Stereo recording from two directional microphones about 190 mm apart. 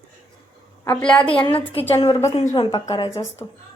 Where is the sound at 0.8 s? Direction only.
5° left (ahead or behind).